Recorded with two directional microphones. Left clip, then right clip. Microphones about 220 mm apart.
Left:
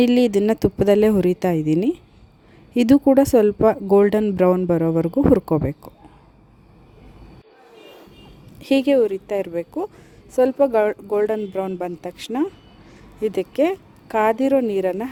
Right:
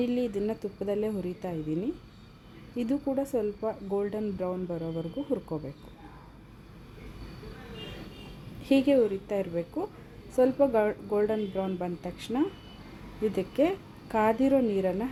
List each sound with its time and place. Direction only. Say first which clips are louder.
0.0 s speech: left 13 dB; 45° left (ahead or behind)
8.6 s speech: left 7 dB; 45° left (ahead or behind)